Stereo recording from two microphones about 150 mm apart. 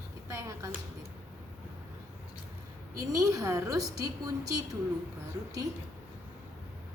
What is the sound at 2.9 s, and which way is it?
A woman's voice, 20° right (ahead or behind).